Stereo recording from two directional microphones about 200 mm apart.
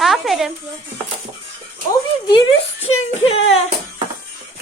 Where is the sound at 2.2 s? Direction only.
25° left (ahead or behind).